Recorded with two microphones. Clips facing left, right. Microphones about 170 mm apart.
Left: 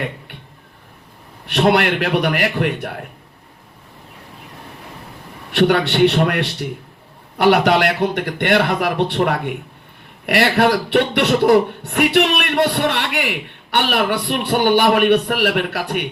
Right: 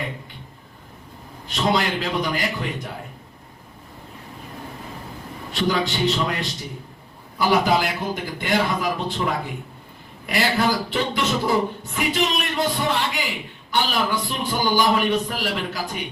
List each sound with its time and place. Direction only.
1.5 s speech: 70° left (ahead or behind)
5.5 s speech: 70° left (ahead or behind)